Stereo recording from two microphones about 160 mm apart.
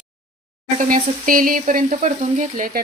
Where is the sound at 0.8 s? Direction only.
55° right (ahead or behind).